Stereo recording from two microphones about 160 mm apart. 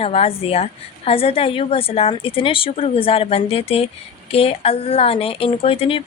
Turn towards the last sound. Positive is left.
turn(degrees=35)  # may be behind; listen again after turning